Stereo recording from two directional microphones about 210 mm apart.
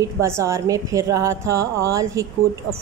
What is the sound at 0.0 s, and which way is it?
A woman's voice, 15° right (ahead or behind).